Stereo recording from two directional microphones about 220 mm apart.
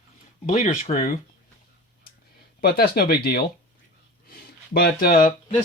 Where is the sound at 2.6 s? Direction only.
45° left (ahead or behind).